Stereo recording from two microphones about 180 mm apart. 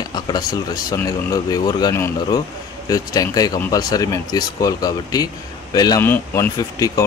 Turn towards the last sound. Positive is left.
turn(degrees=20)  # may be behind; listen again after turning